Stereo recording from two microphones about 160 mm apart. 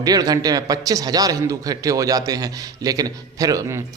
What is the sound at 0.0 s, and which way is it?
A man's voice, 25° right (ahead or behind).